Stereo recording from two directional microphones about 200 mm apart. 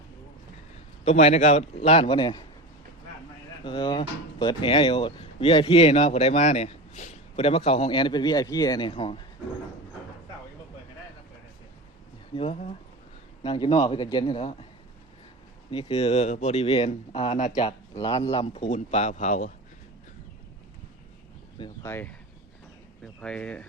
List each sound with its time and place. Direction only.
1.0 s speech: 35° left (ahead or behind)
3.6 s speech: 25° left (ahead or behind)
12.3 s speech: 25° left (ahead or behind)
15.7 s speech: 30° left (ahead or behind)
21.8 s speech: 10° left (ahead or behind)
23.2 s speech: 5° left (ahead or behind)